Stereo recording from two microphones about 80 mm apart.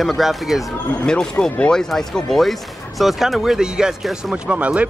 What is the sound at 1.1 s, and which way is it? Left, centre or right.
Speech, centre.